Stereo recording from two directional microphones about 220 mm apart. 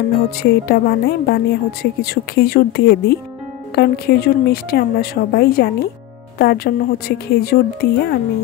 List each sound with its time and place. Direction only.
0.4 s a woman's voice: 45° left (ahead or behind)